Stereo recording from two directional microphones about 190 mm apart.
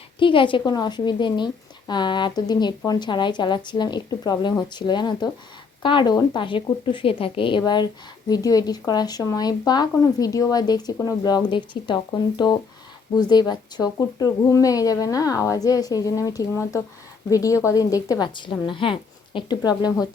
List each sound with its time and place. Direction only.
0.2 s speech: 25° left (ahead or behind)
13.1 s speech: 20° left (ahead or behind)